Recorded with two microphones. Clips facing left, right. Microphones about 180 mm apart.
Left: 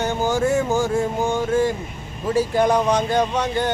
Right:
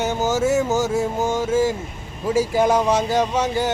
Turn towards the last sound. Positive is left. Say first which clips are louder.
# right 1 dB
turn(degrees=-5)  # may be behind; listen again after turning